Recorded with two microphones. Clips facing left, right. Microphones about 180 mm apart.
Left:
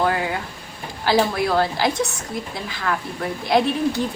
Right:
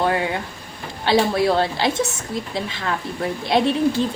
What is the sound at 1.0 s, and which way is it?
A woman's voice, 25° right (ahead or behind).